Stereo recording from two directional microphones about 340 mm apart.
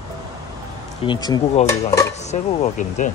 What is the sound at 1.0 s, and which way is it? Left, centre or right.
Speech, centre.